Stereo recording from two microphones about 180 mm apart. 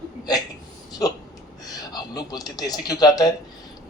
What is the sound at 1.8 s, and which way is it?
Speech, 20° left (ahead or behind).